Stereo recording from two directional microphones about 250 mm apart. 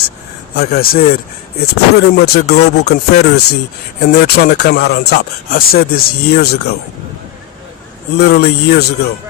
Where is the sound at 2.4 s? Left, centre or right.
Left.